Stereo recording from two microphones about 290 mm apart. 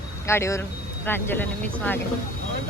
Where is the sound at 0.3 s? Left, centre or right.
Centre.